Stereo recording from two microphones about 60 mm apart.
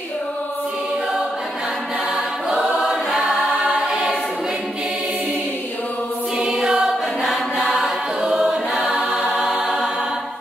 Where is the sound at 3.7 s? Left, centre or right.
Centre.